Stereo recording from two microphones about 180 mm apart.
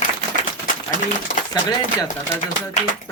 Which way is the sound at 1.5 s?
20° left (ahead or behind).